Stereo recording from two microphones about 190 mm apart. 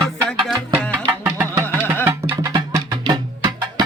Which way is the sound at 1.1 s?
15° right (ahead or behind).